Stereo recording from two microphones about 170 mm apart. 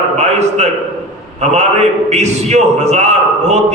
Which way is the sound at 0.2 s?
40° right (ahead or behind).